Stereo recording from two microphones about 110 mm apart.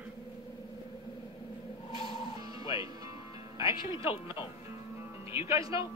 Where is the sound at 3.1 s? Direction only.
60° left (ahead or behind).